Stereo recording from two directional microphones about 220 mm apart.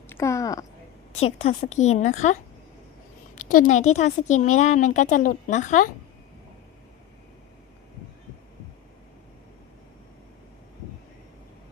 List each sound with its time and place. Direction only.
0.1 s a woman's voice: 15° left (ahead or behind)
1.2 s speech: 30° left (ahead or behind)